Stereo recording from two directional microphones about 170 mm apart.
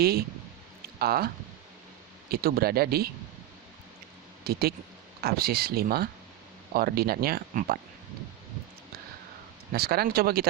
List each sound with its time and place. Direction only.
0.0 s speech: 65° right (ahead or behind)
2.3 s speech: 65° right (ahead or behind)
4.5 s speech: 65° right (ahead or behind)
9.7 s speech: 65° right (ahead or behind)